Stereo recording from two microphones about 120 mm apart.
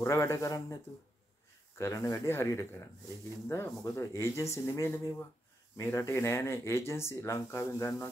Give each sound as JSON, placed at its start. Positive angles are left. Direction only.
{"t": 0.0, "sound": "speech", "side_deg": 25}
{"t": 1.8, "sound": "speech", "side_deg": 25}